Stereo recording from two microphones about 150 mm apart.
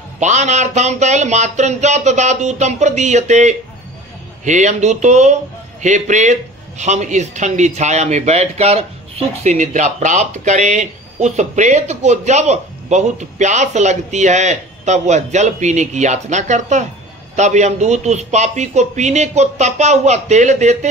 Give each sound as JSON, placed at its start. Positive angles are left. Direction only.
{"t": 0.2, "sound": "speech", "side_deg": -50}